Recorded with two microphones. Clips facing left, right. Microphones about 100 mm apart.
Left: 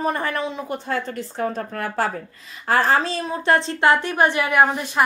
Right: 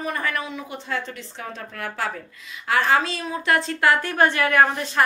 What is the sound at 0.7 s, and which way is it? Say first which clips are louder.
A woman's voice: left 4 dB; 45° left (ahead or behind).